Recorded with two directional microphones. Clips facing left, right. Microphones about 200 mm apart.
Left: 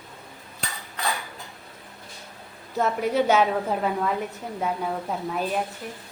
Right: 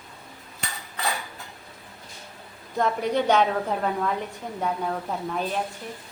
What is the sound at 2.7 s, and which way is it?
A woman's voice, 5° left (ahead or behind).